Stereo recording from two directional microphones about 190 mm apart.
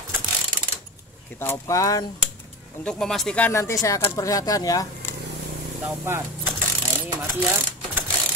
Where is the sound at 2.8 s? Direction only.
5° left (ahead or behind).